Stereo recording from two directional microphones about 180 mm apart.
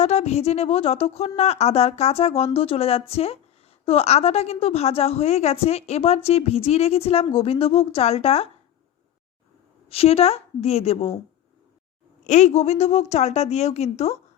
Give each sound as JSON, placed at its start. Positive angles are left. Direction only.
{"t": 0.0, "sound": "a woman's voice", "side_deg": 35}
{"t": 9.9, "sound": "a woman's voice", "side_deg": 35}
{"t": 12.2, "sound": "a woman's voice", "side_deg": 40}